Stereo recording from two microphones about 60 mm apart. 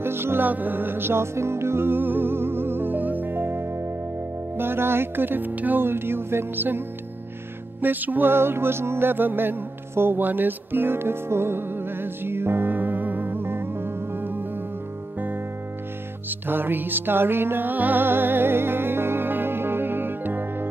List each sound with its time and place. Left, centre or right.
0.0 s music: right
0.5 s music: right
4.6 s speech: right
7.8 s music: right
16.3 s music: right